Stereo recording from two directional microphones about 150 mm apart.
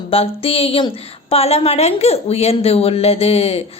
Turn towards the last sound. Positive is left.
turn(degrees=40)  # may be behind; listen again after turning